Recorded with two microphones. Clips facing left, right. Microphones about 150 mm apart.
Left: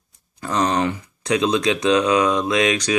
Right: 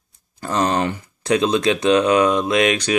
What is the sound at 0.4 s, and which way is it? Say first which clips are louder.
Speech: right 1 dB; 30° right (ahead or behind).